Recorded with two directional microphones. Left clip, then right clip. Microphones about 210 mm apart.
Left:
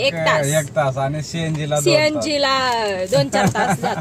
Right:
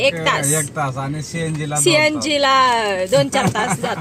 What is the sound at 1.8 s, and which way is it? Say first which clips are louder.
A woman's voice: right 2 dB; 5° right (ahead or behind).